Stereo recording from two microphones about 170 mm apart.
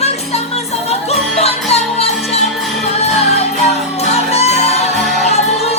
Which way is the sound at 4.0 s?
40° left (ahead or behind).